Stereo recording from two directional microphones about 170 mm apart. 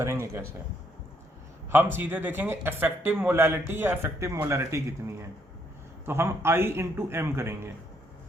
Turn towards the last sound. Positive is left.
turn(degrees=-15)  # may be behind; listen again after turning